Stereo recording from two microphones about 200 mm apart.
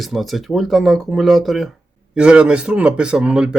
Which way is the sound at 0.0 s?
Centre (ahead or behind).